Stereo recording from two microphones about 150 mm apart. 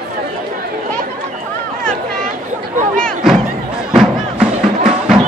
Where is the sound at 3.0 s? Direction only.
Centre (ahead or behind).